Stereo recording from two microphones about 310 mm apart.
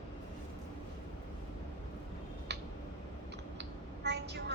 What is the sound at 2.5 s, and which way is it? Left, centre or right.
Tick-tock, right.